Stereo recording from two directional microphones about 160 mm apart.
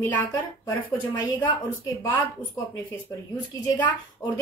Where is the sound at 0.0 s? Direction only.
15° left (ahead or behind).